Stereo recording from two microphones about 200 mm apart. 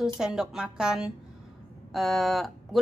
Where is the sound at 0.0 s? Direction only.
5° right (ahead or behind).